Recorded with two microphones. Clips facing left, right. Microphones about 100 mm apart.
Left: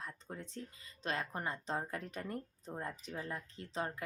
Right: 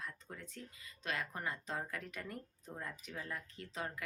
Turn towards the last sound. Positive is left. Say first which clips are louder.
# left 4 dB
turn(degrees=30)  # may be behind; listen again after turning